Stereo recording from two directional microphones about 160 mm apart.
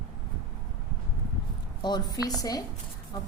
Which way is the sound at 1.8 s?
25° left (ahead or behind).